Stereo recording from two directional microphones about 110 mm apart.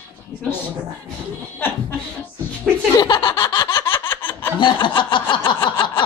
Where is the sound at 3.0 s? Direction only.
40° left (ahead or behind).